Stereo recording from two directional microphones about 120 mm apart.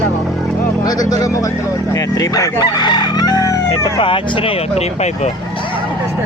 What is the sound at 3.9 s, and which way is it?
Speech, 45° left (ahead or behind).